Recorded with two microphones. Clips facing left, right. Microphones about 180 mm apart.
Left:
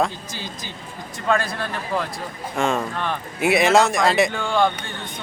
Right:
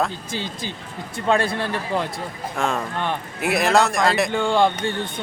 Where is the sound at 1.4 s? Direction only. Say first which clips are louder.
Right 4 dB; 30° right (ahead or behind).